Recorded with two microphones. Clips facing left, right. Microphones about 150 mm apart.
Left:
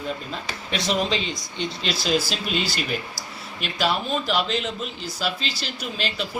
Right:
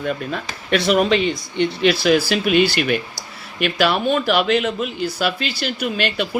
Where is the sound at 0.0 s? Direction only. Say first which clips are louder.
Right 6 dB; 65° right (ahead or behind).